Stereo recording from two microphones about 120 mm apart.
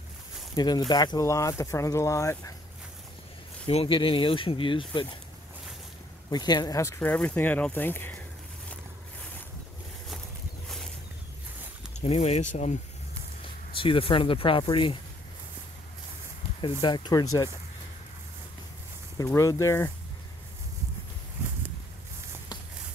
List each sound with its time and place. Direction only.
0.6 s speech: 35° left (ahead or behind)
3.6 s speech: 50° left (ahead or behind)
6.3 s speech: 35° left (ahead or behind)
7.0 s speech: 15° left (ahead or behind)
12.0 s speech: 60° left (ahead or behind)
13.7 s speech: 50° left (ahead or behind)
16.8 s speech: 40° left (ahead or behind)
19.1 s speech: 25° left (ahead or behind)